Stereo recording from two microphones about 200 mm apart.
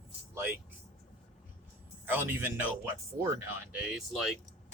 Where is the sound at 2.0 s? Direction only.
10° right (ahead or behind).